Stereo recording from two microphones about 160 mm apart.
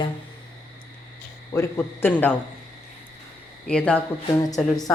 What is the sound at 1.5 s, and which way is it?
Speech, 15° left (ahead or behind).